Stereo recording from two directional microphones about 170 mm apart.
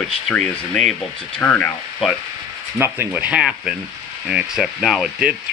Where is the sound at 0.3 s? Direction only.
5° left (ahead or behind).